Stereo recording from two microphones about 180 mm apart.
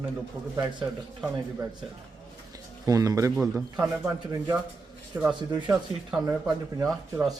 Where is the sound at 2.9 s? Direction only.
20° right (ahead or behind).